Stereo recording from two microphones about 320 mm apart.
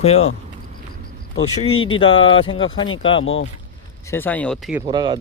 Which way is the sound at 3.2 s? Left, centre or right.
Left.